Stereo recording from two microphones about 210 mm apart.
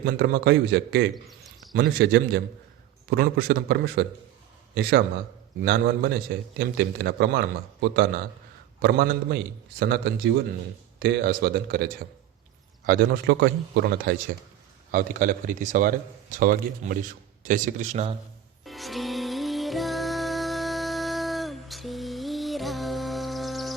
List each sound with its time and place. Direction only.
0.0 s a man's voice: 50° right (ahead or behind)
18.6 s music: centre (ahead or behind)